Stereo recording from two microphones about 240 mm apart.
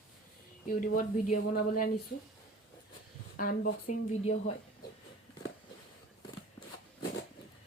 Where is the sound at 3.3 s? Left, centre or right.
Left.